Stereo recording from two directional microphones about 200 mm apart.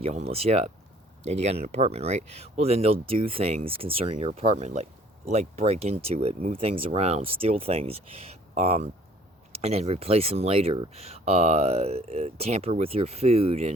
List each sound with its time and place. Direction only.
0.0 s speech: 30° right (ahead or behind)